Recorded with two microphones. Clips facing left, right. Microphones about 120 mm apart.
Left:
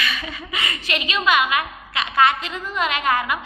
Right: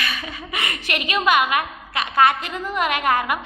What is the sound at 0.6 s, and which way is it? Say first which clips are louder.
A woman's voice: even; 50° right (ahead or behind).